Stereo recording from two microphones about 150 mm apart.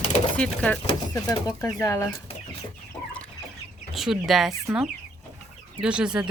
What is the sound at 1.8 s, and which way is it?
Speech, 20° left (ahead or behind).